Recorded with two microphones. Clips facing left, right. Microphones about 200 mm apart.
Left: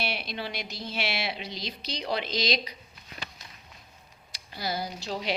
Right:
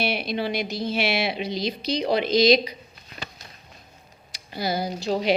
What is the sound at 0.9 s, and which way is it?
Speech, 15° right (ahead or behind).